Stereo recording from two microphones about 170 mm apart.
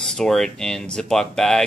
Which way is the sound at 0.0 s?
5° left (ahead or behind).